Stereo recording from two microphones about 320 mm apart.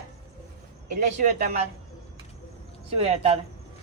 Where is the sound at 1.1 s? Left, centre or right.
Right.